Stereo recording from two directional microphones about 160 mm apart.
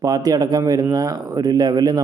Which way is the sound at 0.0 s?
20° right (ahead or behind).